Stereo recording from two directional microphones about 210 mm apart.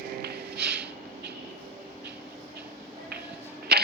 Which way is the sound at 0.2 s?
50° right (ahead or behind).